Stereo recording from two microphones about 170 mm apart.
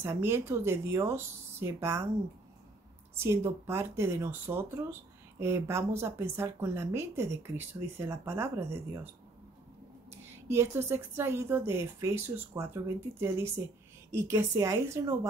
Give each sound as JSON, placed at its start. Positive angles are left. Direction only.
{"t": 0.0, "sound": "a woman's voice", "side_deg": -15}
{"t": 3.2, "sound": "a woman's voice", "side_deg": -15}
{"t": 10.3, "sound": "a woman's voice", "side_deg": -15}